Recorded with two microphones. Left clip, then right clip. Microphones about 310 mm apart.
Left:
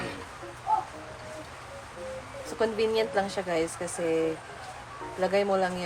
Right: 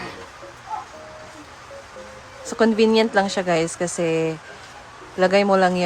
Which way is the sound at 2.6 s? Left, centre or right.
Right.